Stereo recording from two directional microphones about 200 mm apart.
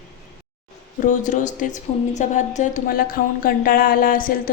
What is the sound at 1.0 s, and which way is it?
A woman's voice, 40° left (ahead or behind).